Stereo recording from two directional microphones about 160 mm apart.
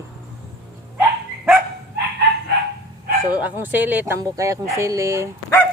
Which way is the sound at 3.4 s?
10° right (ahead or behind).